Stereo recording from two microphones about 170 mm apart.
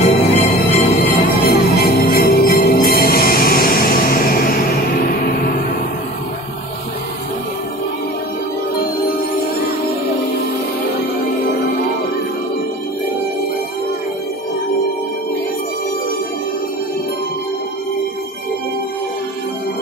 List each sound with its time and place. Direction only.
0.0 s music: 40° left (ahead or behind)
1.2 s music: 65° left (ahead or behind)